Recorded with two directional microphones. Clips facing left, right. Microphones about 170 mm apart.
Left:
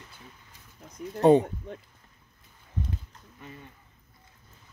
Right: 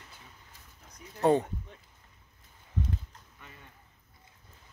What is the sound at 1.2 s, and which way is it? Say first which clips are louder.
Speech: left 6 dB; 20° left (ahead or behind).